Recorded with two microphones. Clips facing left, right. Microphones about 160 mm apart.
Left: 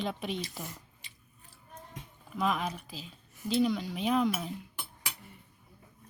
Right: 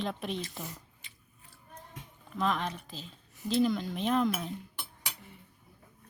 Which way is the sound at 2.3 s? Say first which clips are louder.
Even; 5° left (ahead or behind).